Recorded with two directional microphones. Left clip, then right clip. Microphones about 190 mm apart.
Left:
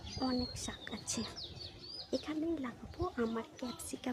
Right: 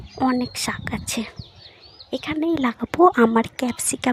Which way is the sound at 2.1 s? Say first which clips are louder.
Right 12 dB; 35° right (ahead or behind).